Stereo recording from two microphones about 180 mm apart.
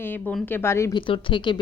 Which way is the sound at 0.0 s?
10° left (ahead or behind).